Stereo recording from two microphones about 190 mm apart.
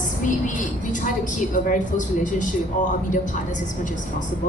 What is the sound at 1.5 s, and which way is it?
Speech, 40° left (ahead or behind).